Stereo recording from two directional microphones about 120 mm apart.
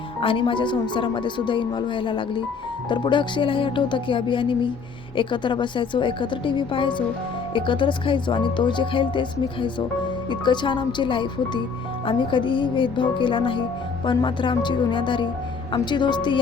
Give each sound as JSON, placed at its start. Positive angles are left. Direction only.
{"t": 0.2, "sound": "speech", "side_deg": 45}